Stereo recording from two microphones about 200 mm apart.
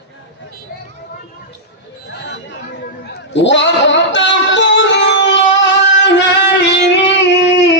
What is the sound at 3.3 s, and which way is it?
Music, 65° left (ahead or behind).